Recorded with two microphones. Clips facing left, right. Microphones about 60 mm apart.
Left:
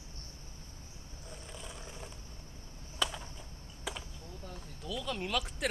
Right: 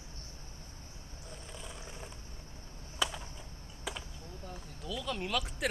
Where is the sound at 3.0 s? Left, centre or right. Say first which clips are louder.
Even; centre.